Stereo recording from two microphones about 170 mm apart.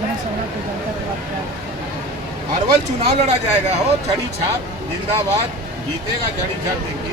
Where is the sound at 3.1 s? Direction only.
40° right (ahead or behind).